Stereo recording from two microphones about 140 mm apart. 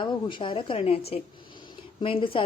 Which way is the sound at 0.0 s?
35° left (ahead or behind).